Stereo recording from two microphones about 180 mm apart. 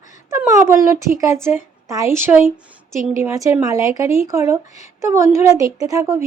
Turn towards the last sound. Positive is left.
turn(degrees=-15)  # may be behind; listen again after turning